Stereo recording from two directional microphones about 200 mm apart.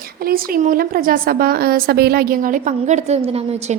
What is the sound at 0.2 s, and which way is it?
A woman's voice, 45° right (ahead or behind).